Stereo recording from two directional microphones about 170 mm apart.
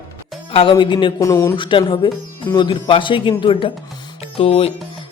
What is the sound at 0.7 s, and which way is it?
Speech, 30° left (ahead or behind).